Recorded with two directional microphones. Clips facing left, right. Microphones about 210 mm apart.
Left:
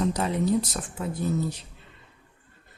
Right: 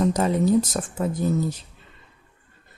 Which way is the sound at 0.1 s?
45° right (ahead or behind).